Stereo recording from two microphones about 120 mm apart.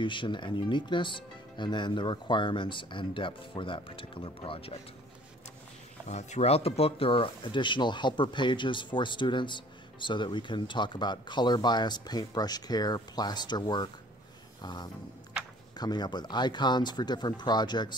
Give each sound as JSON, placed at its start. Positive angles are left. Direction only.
{"t": 0.0, "sound": "speech", "side_deg": 45}
{"t": 6.0, "sound": "speech", "side_deg": 70}
{"t": 14.6, "sound": "music", "side_deg": 35}
{"t": 15.7, "sound": "speech", "side_deg": 35}